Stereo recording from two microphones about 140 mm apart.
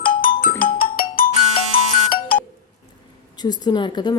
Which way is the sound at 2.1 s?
90° left.